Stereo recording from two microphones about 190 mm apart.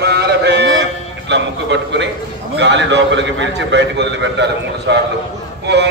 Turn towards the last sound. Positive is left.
turn(degrees=-65)  # may be behind; listen again after turning